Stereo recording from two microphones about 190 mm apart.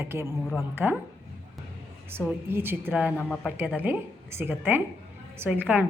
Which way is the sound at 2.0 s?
10° right (ahead or behind).